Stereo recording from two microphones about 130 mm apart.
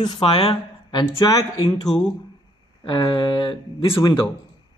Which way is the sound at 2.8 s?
40° left (ahead or behind).